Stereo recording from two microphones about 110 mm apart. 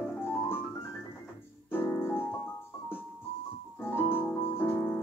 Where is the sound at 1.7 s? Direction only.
20° left (ahead or behind).